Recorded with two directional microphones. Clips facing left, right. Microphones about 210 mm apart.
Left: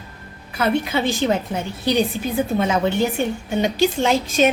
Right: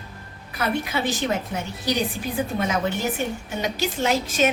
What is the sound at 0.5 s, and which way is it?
A woman's voice, 25° left (ahead or behind).